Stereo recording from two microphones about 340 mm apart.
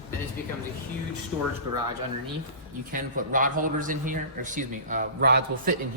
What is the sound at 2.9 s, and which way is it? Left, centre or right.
A man's voice, right.